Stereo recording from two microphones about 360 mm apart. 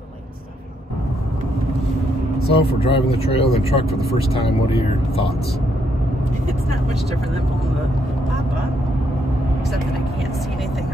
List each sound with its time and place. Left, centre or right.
2.4 s speech: centre